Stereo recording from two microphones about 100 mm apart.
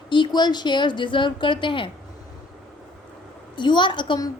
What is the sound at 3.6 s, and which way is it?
Speech, 50° left (ahead or behind).